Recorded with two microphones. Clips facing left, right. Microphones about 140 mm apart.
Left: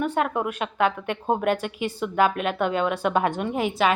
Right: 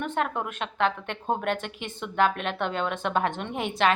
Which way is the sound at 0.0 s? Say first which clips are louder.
Left 4 dB; 10° left (ahead or behind).